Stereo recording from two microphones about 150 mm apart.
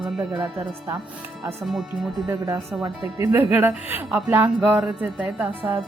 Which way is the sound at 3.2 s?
15° right (ahead or behind).